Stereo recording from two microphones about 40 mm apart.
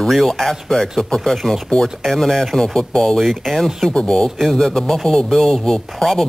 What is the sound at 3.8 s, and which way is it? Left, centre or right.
Speech, centre.